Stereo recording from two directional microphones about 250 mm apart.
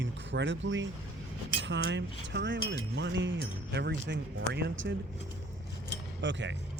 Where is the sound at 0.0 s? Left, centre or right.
Right.